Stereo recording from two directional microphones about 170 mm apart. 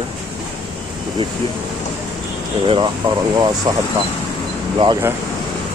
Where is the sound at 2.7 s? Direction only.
25° right (ahead or behind).